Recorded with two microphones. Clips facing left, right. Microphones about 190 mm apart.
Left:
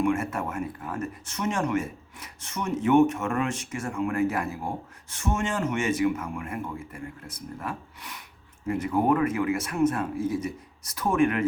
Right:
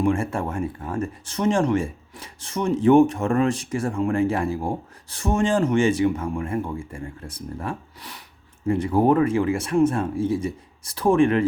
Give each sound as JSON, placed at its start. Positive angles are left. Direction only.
{"t": 0.0, "sound": "speech", "side_deg": -30}